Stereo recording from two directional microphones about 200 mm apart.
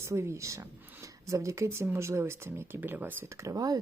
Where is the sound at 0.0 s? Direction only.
15° right (ahead or behind).